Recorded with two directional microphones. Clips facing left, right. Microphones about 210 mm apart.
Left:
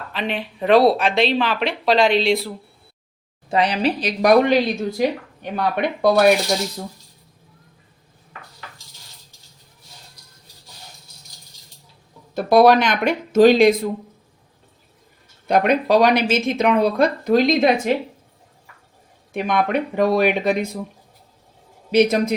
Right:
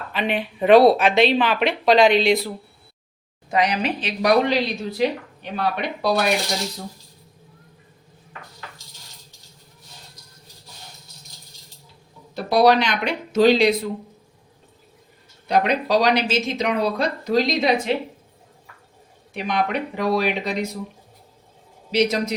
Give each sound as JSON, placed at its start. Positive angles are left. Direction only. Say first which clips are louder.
{"t": 0.1, "sound": "speech", "louder": "right 2 dB", "side_deg": -5}
{"t": 3.5, "sound": "speech", "louder": "left 2 dB", "side_deg": 30}
{"t": 4.2, "sound": "speech", "louder": "left 4 dB", "side_deg": 50}
{"t": 12.3, "sound": "speech", "louder": "left 3 dB", "side_deg": 50}
{"t": 15.4, "sound": "speech", "louder": "left 3 dB", "side_deg": 50}
{"t": 19.3, "sound": "speech", "louder": "left 3 dB", "side_deg": 50}
{"t": 21.9, "sound": "speech", "louder": "left 4 dB", "side_deg": 55}